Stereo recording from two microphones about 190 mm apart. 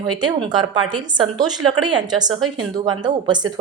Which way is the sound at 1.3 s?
20° right (ahead or behind).